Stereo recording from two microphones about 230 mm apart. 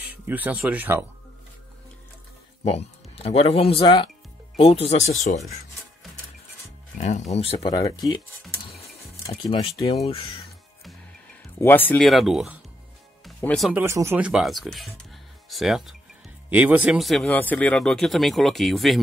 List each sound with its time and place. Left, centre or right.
0.1 s speech: centre
2.6 s speech: left
7.0 s speech: left
9.3 s speech: left
11.6 s speech: centre